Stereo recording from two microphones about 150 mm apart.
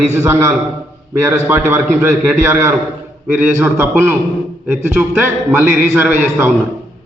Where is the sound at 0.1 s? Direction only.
15° right (ahead or behind).